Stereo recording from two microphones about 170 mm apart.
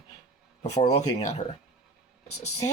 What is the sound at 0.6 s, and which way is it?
Speech, 40° left (ahead or behind).